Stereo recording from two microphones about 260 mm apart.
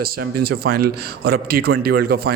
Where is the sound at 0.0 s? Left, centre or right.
Right.